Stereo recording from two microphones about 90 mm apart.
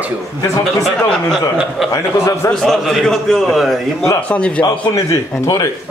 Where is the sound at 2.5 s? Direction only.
5° left (ahead or behind).